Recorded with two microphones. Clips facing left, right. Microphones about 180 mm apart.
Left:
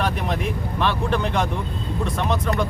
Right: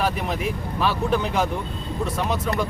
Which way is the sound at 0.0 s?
5° right (ahead or behind).